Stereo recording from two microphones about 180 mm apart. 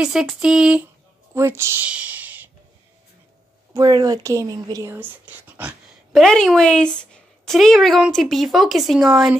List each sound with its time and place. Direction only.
0.0 s a woman's voice: centre (ahead or behind)
3.7 s speech: 20° right (ahead or behind)
6.2 s a woman's voice: 5° left (ahead or behind)